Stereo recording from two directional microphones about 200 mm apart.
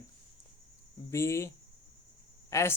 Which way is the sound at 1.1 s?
15° left (ahead or behind).